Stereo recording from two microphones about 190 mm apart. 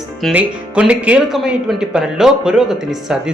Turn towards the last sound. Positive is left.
turn(degrees=-5)  # may be behind; listen again after turning